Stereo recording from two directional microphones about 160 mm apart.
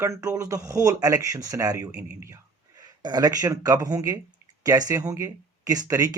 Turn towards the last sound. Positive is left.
turn(degrees=-20)  # may be behind; listen again after turning